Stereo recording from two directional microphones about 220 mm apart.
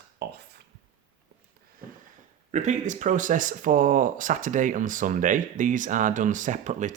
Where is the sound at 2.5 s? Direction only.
35° right (ahead or behind).